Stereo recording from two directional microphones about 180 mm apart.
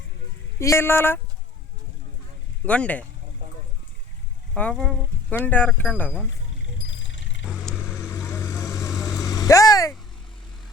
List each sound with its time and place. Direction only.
0.6 s speech: 15° left (ahead or behind)
2.6 s speech: 5° left (ahead or behind)
4.5 s speech: 5° left (ahead or behind)
6.6 s music: 90° left
7.5 s vehicle: centre (ahead or behind)
7.9 s vehicle: 15° left (ahead or behind)